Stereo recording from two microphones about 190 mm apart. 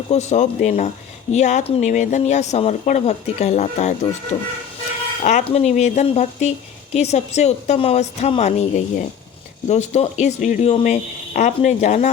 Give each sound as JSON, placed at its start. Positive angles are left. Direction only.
{"t": 0.1, "sound": "speech", "side_deg": 35}
{"t": 5.2, "sound": "speech", "side_deg": 35}